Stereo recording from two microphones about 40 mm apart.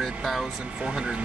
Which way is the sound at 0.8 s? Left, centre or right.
Right.